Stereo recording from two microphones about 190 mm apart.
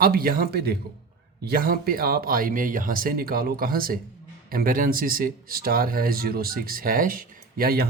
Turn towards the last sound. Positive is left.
turn(degrees=-50)  # may be behind; listen again after turning